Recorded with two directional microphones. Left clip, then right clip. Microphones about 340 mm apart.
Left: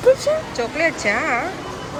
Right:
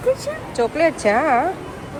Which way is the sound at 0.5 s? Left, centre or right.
Centre.